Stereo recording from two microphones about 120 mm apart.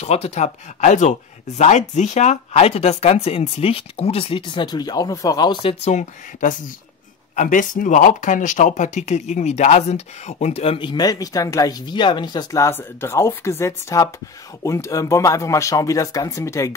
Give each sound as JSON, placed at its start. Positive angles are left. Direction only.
{"t": 0.0, "sound": "speech", "side_deg": 60}
{"t": 5.9, "sound": "speech", "side_deg": 80}
{"t": 7.3, "sound": "speech", "side_deg": 90}
{"t": 10.9, "sound": "speech", "side_deg": 35}